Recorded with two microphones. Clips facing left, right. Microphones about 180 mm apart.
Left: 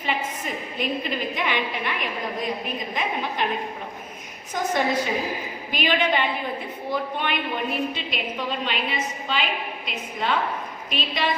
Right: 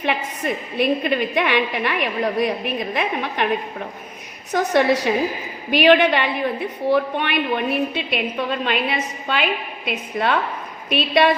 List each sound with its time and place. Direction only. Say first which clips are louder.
0.0 s a woman's voice: right 5 dB; 70° right (ahead or behind)
4.5 s a woman's voice: right 6 dB; 75° right (ahead or behind)